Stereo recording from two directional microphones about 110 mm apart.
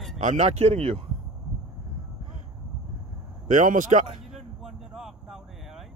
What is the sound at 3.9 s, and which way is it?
Speech, 90° right.